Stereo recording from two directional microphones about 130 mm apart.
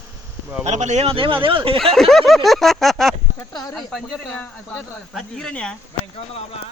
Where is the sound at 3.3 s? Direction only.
25° left (ahead or behind).